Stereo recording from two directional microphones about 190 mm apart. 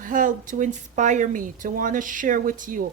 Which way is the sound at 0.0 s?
45° right (ahead or behind).